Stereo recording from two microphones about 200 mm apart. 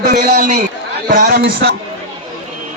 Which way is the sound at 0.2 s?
40° right (ahead or behind).